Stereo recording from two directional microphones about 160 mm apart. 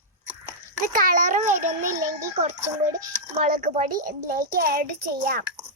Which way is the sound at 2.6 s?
20° right (ahead or behind).